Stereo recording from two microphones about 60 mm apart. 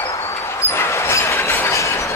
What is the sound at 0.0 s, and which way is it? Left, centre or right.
Vehicle, left.